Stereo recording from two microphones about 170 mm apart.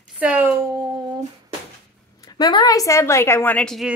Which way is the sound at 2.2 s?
25° left (ahead or behind).